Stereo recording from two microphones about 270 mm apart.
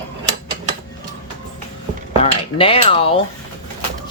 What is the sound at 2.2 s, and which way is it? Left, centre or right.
Speech, left.